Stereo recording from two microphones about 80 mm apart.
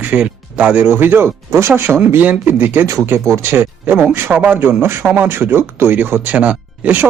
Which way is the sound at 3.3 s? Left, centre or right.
Right.